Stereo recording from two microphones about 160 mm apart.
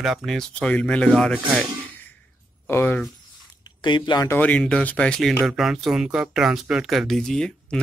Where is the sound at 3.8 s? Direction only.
30° left (ahead or behind).